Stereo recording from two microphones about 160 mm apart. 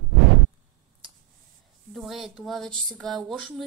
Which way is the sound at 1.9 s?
Centre (ahead or behind).